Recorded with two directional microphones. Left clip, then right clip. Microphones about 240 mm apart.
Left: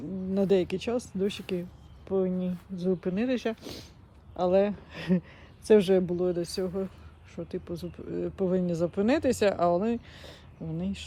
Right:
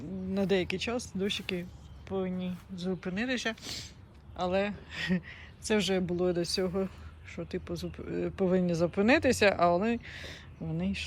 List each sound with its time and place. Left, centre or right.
0.3 s speech: centre